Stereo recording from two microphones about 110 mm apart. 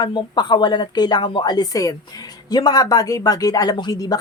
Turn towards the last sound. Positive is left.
turn(degrees=35)  # may be behind; listen again after turning